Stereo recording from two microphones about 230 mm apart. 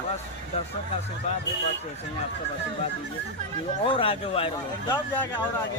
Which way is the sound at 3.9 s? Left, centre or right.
Left.